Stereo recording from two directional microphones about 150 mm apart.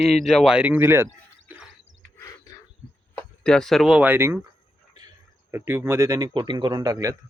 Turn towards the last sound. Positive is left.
turn(degrees=-20)  # may be behind; listen again after turning